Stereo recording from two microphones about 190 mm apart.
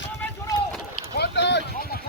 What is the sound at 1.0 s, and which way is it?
Boat, 65° left (ahead or behind).